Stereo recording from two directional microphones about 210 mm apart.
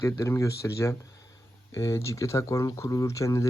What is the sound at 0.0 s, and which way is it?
Speech, 15° left (ahead or behind).